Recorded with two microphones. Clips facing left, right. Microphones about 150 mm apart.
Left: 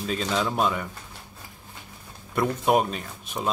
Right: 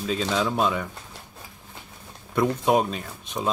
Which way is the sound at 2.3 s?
Centre (ahead or behind).